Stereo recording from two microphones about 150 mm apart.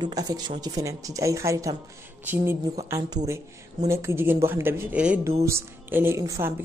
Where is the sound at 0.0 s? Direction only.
25° right (ahead or behind).